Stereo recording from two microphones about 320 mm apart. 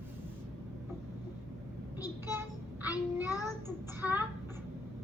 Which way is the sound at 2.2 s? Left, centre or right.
Centre.